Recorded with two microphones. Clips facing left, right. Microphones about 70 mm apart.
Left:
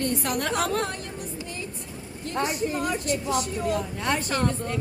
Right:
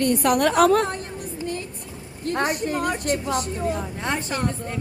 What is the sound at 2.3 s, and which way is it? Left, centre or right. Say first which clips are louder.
A woman's voice: right 3 dB; right.